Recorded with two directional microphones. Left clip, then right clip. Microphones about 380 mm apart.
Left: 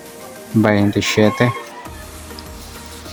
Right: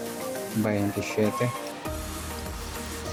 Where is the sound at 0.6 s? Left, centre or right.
Centre.